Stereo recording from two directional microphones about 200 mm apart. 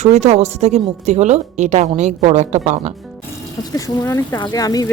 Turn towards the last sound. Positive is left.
turn(degrees=20)  # may be behind; listen again after turning